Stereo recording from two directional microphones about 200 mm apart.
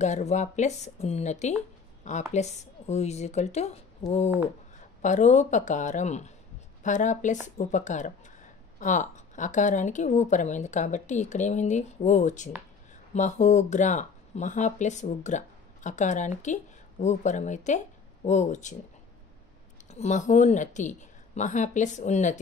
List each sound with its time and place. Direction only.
0.0 s speech: 35° left (ahead or behind)
19.9 s speech: 35° left (ahead or behind)